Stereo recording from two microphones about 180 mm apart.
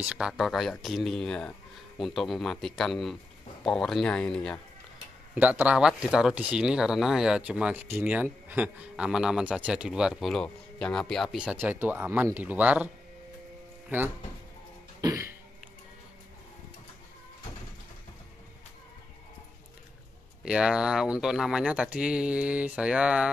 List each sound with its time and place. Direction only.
0.0 s speech: 5° right (ahead or behind)
5.3 s speech: 10° right (ahead or behind)
15.0 s cough: 20° right (ahead or behind)
20.4 s speech: 5° right (ahead or behind)